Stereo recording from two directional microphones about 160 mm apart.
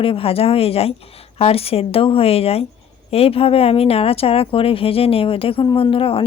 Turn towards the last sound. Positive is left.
turn(degrees=35)  # may be behind; listen again after turning